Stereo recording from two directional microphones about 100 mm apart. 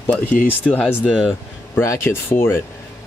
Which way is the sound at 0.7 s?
15° left (ahead or behind).